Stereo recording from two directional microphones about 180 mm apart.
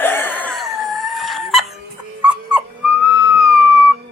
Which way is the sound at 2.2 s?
10° right (ahead or behind).